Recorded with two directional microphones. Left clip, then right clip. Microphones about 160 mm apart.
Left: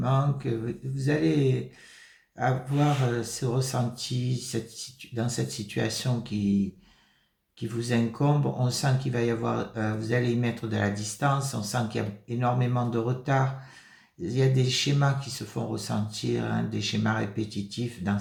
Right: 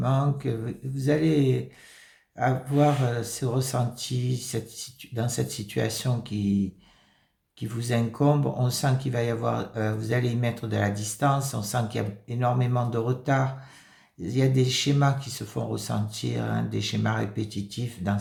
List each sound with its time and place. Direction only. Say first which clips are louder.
0.0 s speech: right 1 dB; 45° right (ahead or behind)
7.6 s speech: even; 45° right (ahead or behind)